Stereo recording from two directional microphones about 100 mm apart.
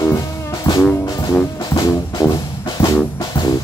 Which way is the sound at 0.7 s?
40° left (ahead or behind).